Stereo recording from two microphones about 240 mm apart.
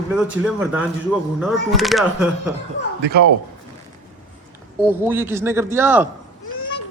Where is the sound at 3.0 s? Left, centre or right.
Right.